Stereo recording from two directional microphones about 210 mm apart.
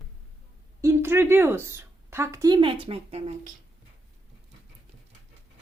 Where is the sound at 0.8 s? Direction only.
10° right (ahead or behind); by 3.5 s 30° right (ahead or behind).